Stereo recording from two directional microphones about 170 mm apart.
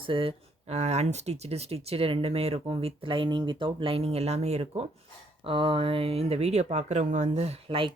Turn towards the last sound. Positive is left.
turn(degrees=-30)  # may be behind; listen again after turning